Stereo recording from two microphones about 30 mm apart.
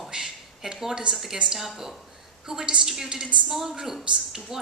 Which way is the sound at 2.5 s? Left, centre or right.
Right.